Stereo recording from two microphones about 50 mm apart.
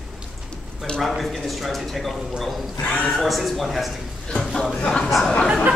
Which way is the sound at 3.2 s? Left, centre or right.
Centre.